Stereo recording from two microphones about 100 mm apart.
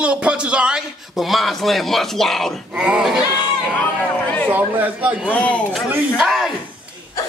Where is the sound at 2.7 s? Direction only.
10° right (ahead or behind).